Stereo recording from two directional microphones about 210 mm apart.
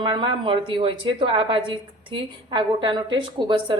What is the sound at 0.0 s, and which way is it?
A woman's voice, 20° right (ahead or behind).